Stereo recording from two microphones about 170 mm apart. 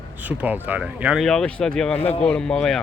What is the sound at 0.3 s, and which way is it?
Speech, 10° right (ahead or behind).